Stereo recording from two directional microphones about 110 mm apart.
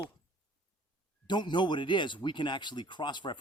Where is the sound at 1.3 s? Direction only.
45° left (ahead or behind).